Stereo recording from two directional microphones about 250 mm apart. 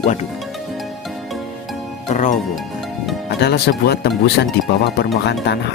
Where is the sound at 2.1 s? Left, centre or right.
Left.